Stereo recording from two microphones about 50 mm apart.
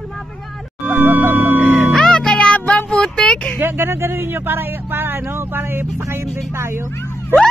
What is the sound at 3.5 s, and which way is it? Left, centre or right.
Speech, right.